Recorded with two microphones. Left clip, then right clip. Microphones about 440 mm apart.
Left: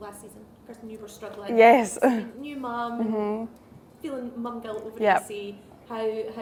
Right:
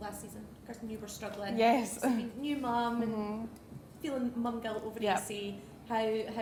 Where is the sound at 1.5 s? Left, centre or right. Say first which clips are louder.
Left 13 dB; left.